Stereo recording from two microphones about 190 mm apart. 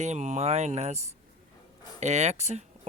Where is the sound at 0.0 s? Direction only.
35° right (ahead or behind).